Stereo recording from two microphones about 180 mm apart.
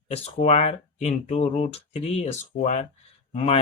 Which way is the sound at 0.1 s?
35° left (ahead or behind).